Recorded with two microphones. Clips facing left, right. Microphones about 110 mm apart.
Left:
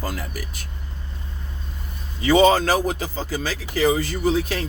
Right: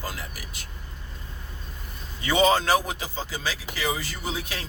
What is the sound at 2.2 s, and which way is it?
Speech, 40° left (ahead or behind).